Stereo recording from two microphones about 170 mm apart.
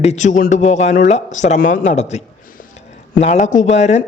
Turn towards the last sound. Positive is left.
turn(degrees=40)  # may be behind; listen again after turning